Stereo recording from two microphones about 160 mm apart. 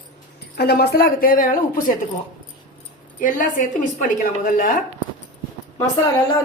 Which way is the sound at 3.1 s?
55° left (ahead or behind).